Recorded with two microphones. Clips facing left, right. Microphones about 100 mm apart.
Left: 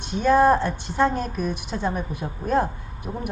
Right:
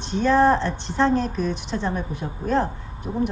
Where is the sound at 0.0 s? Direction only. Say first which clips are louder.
Even; 10° left (ahead or behind).